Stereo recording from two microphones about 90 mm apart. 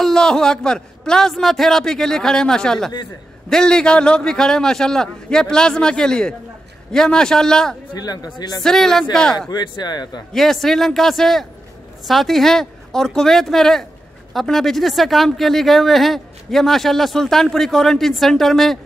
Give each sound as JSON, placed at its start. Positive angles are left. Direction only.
{"t": 0.0, "sound": "a man's voice", "side_deg": 5}
{"t": 7.9, "sound": "speech", "side_deg": 45}
{"t": 8.6, "sound": "speech", "side_deg": 5}
{"t": 9.5, "sound": "speech", "side_deg": 55}
{"t": 10.3, "sound": "speech", "side_deg": 5}